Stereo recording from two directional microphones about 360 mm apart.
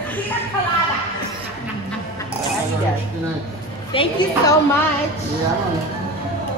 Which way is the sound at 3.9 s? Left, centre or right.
Centre.